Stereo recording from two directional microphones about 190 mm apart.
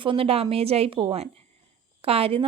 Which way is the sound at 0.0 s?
30° right (ahead or behind).